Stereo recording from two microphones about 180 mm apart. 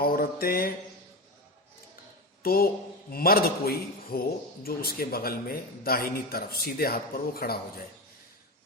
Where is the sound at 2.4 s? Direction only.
55° left (ahead or behind).